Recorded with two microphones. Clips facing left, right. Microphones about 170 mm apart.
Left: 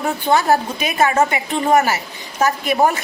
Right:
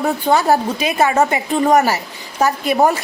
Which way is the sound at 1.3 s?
35° right (ahead or behind).